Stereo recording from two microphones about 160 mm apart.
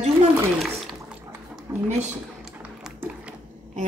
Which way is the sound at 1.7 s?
20° right (ahead or behind).